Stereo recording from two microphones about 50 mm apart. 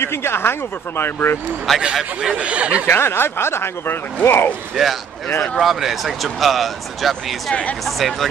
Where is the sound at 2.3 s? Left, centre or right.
Right.